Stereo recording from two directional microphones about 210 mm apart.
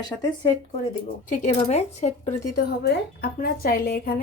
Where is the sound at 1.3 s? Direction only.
35° left (ahead or behind).